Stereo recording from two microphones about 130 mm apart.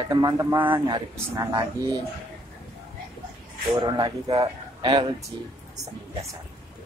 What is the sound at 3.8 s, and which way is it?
Speech, 30° right (ahead or behind).